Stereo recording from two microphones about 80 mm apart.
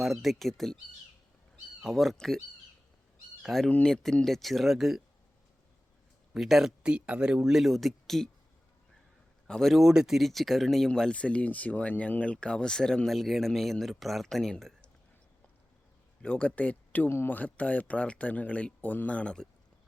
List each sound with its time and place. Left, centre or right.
0.0 s speech: centre
1.8 s speech: centre
3.4 s speech: centre
6.3 s speech: centre
9.5 s speech: centre
16.2 s speech: centre